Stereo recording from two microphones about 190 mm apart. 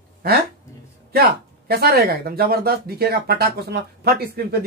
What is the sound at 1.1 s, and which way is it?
Speech, 55° right (ahead or behind).